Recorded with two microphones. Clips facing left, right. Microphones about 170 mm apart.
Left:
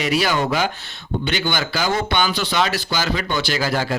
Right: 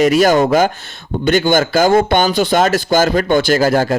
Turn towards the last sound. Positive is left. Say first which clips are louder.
# right 9 dB
turn(degrees=-45)  # may be behind; listen again after turning